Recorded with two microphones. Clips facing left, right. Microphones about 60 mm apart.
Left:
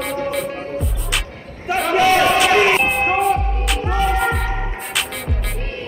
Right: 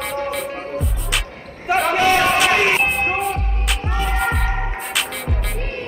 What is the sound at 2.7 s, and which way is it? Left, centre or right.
Music, centre.